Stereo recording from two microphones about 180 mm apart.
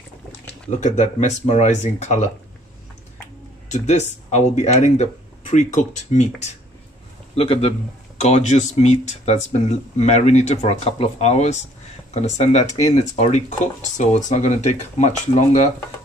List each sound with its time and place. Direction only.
0.7 s speech: 40° left (ahead or behind)
3.7 s speech: 40° left (ahead or behind)
7.3 s speech: 30° left (ahead or behind)